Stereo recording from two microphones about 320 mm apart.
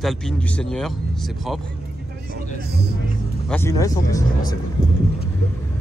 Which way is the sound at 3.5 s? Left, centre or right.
Centre.